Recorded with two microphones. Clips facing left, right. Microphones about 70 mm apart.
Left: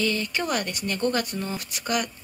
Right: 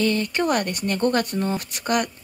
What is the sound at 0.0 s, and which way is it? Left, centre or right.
Speech, right.